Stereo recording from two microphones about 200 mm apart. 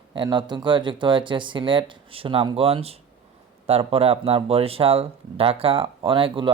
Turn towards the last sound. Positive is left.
turn(degrees=-25)  # may be behind; listen again after turning